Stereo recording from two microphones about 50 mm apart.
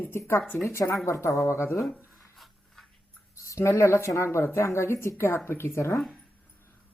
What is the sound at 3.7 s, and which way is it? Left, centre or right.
Speech, left.